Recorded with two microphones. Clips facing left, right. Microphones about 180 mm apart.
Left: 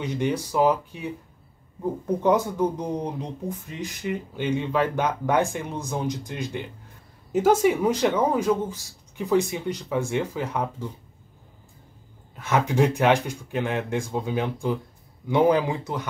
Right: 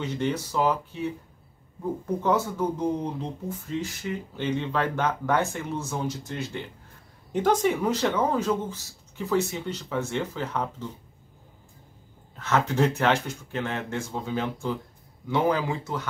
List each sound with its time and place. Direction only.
0.0 s speech: 15° left (ahead or behind)
2.2 s speech: 15° left (ahead or behind)
12.4 s speech: 10° left (ahead or behind)